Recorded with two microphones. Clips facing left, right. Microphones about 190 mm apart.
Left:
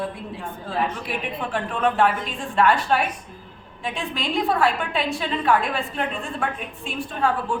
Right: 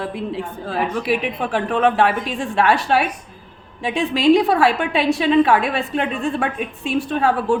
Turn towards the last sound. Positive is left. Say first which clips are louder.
# right 6 dB
turn(degrees=-80)